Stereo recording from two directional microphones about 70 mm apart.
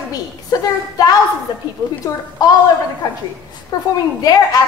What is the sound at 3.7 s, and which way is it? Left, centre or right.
Speech, left.